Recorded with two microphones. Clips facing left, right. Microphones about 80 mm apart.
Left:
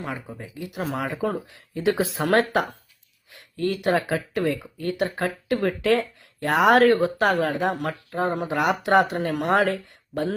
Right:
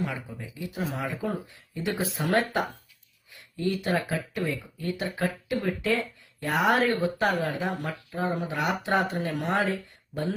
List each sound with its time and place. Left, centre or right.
0.5 s speech: left
0.8 s speech: left
1.0 s speech: left
3.3 s speech: left